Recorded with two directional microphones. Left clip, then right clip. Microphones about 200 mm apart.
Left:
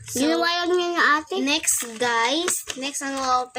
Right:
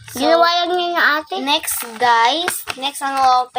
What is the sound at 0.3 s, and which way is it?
Child singing, 5° left (ahead or behind).